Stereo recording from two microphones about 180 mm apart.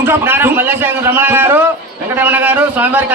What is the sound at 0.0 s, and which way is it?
A man's voice, 10° right (ahead or behind).